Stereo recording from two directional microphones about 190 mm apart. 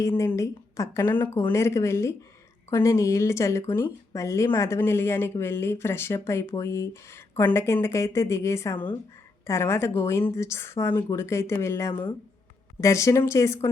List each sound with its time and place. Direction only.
0.0 s speech: 15° left (ahead or behind)